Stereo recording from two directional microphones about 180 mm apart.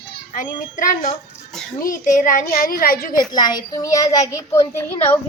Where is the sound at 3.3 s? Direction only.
25° left (ahead or behind).